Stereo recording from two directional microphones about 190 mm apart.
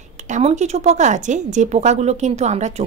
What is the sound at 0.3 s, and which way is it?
A woman's voice, 35° right (ahead or behind).